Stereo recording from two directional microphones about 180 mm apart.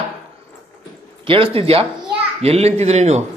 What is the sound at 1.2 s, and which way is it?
A child's voice, 30° right (ahead or behind).